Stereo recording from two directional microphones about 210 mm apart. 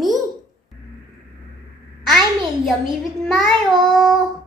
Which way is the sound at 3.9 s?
Centre (ahead or behind).